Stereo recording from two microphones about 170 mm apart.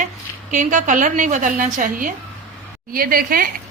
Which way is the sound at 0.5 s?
50° right (ahead or behind).